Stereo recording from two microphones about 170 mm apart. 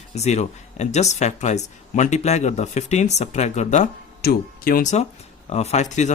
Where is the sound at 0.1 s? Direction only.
40° left (ahead or behind).